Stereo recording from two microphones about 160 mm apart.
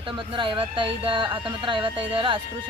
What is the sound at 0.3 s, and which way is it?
Speech, 30° right (ahead or behind).